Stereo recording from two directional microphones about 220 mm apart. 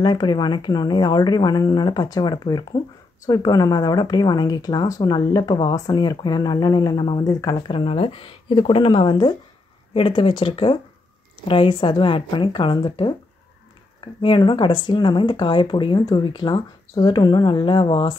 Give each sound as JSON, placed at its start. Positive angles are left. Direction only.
{"t": 0.0, "sound": "speech", "side_deg": 20}